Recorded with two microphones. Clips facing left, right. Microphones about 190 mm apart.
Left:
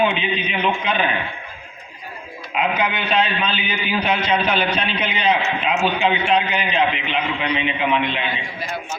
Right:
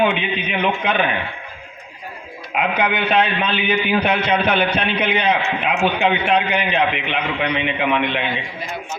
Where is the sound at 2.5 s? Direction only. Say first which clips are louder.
Right 1 dB; 60° right (ahead or behind).